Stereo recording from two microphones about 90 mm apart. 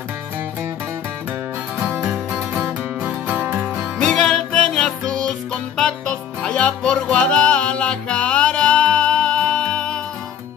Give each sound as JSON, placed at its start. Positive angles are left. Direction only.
{"t": 1.9, "sound": "music", "side_deg": -20}
{"t": 4.0, "sound": "music", "side_deg": 10}